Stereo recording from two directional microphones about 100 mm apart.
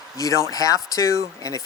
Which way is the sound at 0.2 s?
35° left (ahead or behind).